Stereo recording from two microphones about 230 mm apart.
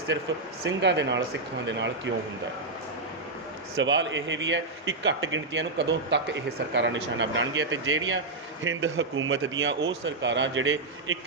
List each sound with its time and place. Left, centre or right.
0.1 s speech: right
3.8 s speech: right